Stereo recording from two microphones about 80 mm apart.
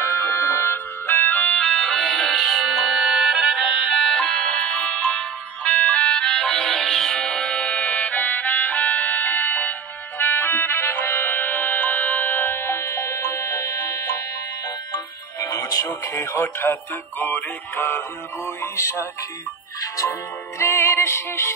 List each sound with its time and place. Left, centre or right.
0.0 s music: left
1.6 s music: centre; by 14.2 s left
15.4 s music: left
16.3 s music: left
18.6 s music: left